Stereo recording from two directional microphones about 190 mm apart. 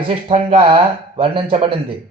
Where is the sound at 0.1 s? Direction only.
30° right (ahead or behind).